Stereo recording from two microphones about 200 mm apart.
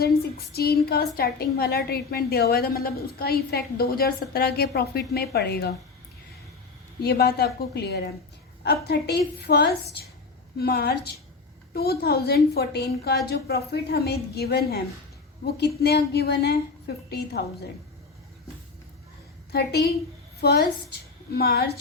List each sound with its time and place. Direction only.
0.0 s a woman's voice: 50° left (ahead or behind)
7.0 s a woman's voice: 50° left (ahead or behind)
19.5 s a woman's voice: 50° left (ahead or behind)